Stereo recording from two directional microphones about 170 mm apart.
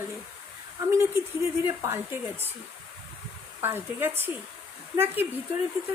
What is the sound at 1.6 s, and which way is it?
Speech, 15° right (ahead or behind).